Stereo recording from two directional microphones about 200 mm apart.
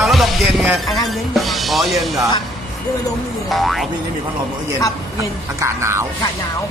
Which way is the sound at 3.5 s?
Centre (ahead or behind).